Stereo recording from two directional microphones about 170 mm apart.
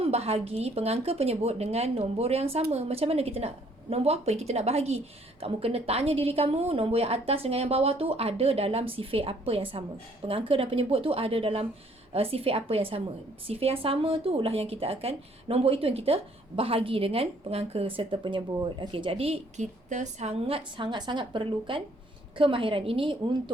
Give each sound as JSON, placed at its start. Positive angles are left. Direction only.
{"t": 0.0, "sound": "speech", "side_deg": -35}